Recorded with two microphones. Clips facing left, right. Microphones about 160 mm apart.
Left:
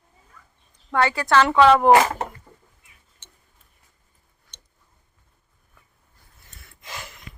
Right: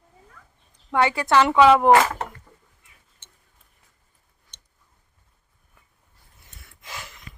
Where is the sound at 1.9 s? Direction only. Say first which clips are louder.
Left 1 dB; 15° left (ahead or behind).